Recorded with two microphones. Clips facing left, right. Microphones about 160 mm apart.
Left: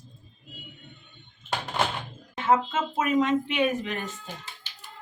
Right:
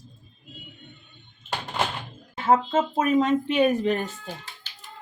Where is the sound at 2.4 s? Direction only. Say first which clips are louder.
Right 3 dB; 35° right (ahead or behind).